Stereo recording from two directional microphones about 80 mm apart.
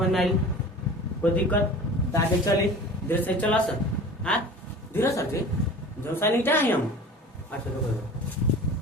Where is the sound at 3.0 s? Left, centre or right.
Centre.